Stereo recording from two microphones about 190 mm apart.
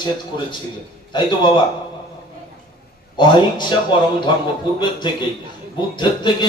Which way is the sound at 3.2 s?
25° left (ahead or behind).